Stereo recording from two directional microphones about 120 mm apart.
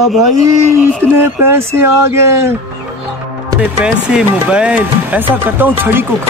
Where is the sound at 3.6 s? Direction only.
10° right (ahead or behind).